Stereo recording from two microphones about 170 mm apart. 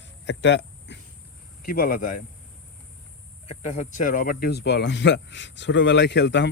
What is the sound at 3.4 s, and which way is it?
Speech, 40° left (ahead or behind).